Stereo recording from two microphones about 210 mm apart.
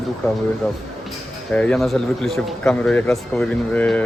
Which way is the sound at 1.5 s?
5° left (ahead or behind).